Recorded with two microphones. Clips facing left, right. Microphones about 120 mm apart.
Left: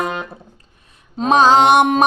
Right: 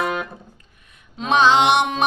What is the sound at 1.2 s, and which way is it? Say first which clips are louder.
Music: left 4 dB; 40° left (ahead or behind).